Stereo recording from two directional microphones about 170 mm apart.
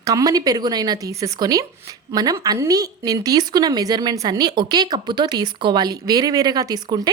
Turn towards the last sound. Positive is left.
turn(degrees=-25)  # may be behind; listen again after turning